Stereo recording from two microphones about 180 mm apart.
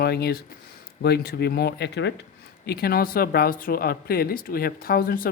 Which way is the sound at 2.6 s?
60° left (ahead or behind).